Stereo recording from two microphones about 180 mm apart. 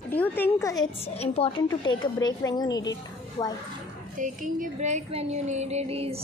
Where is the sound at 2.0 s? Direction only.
20° left (ahead or behind).